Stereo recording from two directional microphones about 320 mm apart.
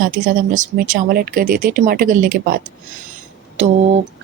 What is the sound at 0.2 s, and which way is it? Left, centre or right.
Speech, right.